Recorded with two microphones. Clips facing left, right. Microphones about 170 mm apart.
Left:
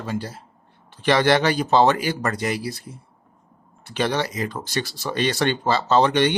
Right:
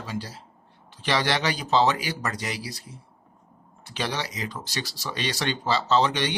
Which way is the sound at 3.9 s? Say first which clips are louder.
Left 7 dB; 55° left (ahead or behind).